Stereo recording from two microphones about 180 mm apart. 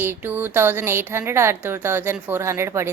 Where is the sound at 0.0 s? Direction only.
10° right (ahead or behind).